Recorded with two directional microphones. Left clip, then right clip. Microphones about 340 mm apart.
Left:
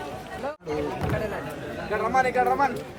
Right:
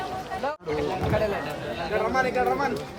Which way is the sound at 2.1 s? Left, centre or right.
Left.